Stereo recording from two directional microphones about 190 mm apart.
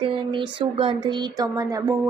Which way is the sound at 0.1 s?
25° right (ahead or behind).